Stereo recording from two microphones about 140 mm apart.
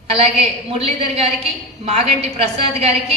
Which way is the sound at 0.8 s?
50° right (ahead or behind).